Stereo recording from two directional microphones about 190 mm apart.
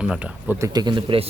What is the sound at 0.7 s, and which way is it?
Speech, 25° right (ahead or behind).